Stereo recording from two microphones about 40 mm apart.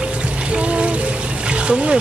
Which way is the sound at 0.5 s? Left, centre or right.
Right.